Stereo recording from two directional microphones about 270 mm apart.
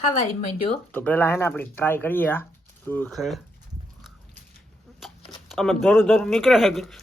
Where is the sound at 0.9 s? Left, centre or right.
Centre.